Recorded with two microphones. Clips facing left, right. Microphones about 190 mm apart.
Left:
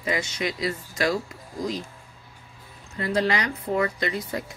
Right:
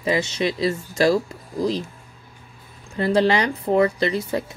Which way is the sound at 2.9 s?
30° right (ahead or behind).